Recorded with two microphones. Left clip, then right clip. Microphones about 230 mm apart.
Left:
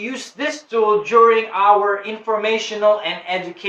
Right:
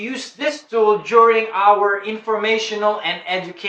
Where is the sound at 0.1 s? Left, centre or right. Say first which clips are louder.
Right 1 dB; centre.